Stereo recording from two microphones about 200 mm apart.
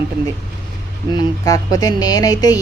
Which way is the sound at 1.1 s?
20° left (ahead or behind).